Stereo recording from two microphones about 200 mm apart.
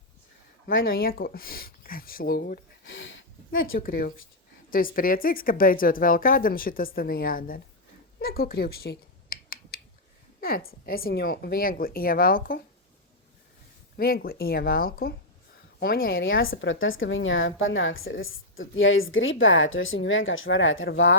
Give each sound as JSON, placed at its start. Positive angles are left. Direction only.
{"t": 0.9, "sound": "speech", "side_deg": 50}
{"t": 2.8, "sound": "a sound", "side_deg": 70}
{"t": 3.8, "sound": "speech", "side_deg": 50}
{"t": 8.2, "sound": "finger snapping", "side_deg": 50}
{"t": 10.4, "sound": "speech", "side_deg": 50}
{"t": 13.9, "sound": "speech", "side_deg": 50}
{"t": 16.1, "sound": "speech", "side_deg": 75}